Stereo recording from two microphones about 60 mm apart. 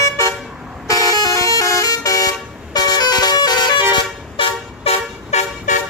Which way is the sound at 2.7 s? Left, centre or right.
Left.